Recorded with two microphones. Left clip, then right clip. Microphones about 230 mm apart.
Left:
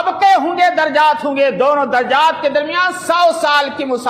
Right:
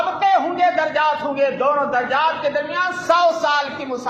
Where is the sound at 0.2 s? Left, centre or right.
Left.